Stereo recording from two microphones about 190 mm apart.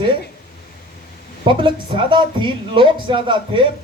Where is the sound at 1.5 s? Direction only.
25° right (ahead or behind).